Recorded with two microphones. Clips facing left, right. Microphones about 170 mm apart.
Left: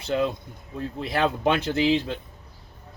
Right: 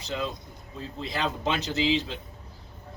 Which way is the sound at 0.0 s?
60° left (ahead or behind).